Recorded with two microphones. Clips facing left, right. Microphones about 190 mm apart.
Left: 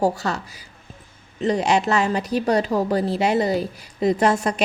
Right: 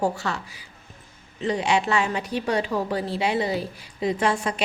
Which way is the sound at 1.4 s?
40° left (ahead or behind).